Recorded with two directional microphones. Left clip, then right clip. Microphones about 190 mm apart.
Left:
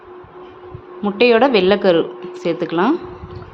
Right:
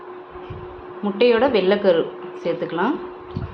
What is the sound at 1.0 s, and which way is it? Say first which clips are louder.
A woman's voice: left 4 dB; 40° left (ahead or behind).